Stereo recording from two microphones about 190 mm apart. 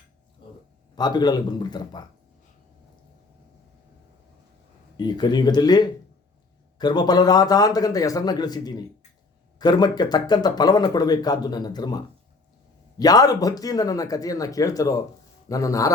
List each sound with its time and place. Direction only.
0.9 s speech: 20° left (ahead or behind)
4.9 s a man's voice: 20° left (ahead or behind)